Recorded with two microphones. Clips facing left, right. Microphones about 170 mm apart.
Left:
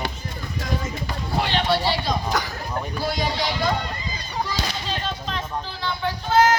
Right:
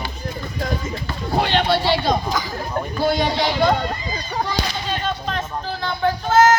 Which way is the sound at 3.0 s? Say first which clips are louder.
Right 7 dB; 55° right (ahead or behind).